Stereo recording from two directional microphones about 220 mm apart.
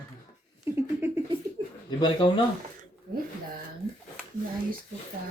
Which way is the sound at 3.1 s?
40° right (ahead or behind).